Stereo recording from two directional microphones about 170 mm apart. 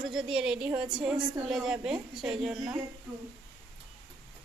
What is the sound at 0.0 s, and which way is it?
Speech, 5° right (ahead or behind).